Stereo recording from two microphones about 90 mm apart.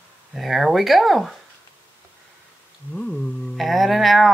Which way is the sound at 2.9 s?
10° left (ahead or behind).